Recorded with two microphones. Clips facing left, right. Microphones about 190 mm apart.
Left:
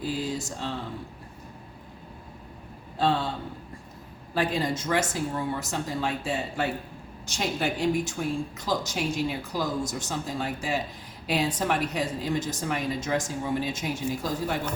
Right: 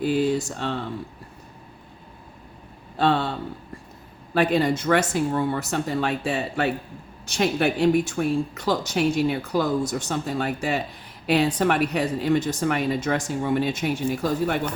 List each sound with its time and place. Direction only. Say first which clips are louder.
0.0 s speech: right 8 dB; 65° right (ahead or behind)
3.0 s speech: right 4 dB; 65° right (ahead or behind)
4.4 s speech: right 6 dB; 65° right (ahead or behind)